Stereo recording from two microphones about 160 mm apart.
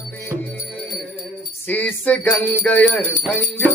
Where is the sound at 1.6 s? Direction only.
10° left (ahead or behind).